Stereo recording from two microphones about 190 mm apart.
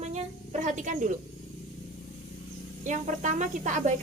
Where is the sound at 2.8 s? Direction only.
40° right (ahead or behind).